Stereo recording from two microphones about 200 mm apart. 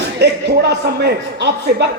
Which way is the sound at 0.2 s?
60° right (ahead or behind).